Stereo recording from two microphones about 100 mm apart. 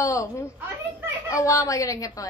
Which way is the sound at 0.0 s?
30° left (ahead or behind).